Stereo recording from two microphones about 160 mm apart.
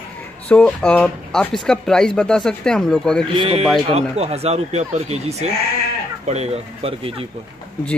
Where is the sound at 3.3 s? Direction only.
35° right (ahead or behind).